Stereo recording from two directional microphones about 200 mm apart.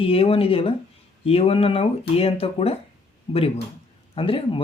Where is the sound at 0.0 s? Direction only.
30° left (ahead or behind).